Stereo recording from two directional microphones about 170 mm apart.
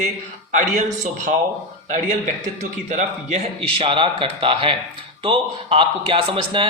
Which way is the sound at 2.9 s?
40° right (ahead or behind).